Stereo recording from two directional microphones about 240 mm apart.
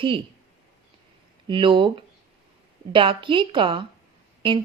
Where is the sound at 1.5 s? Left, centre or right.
Right.